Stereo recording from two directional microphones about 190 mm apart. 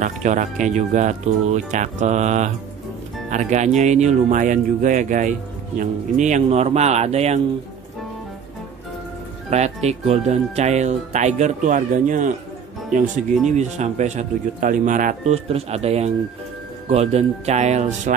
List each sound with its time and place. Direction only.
0.0 s speech: 40° right (ahead or behind)
9.5 s speech: 35° right (ahead or behind)